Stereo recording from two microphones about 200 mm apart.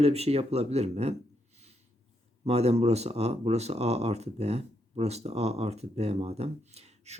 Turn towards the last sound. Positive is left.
turn(degrees=-30)  # may be behind; listen again after turning